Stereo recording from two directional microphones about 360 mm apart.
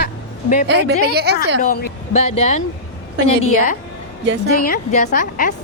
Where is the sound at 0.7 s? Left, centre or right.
Right.